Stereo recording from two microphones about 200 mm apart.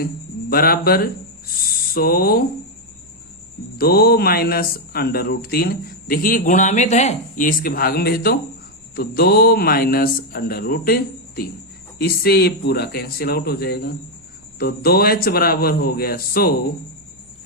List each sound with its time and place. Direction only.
0.5 s speech: 50° left (ahead or behind)
3.8 s speech: 50° left (ahead or behind)